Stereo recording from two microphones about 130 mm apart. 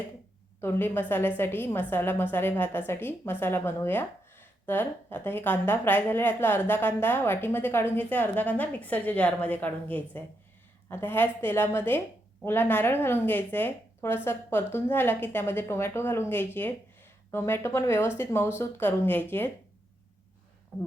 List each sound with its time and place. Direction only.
0.6 s speech: 15° left (ahead or behind)
20.7 s speech: 5° left (ahead or behind)